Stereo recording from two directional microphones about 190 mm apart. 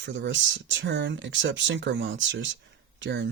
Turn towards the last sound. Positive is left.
turn(degrees=-65)  # may be behind; listen again after turning